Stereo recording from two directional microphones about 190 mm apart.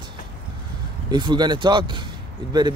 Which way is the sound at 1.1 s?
25° right (ahead or behind).